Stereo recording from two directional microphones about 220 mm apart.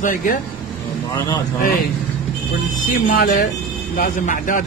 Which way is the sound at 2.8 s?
40° left (ahead or behind).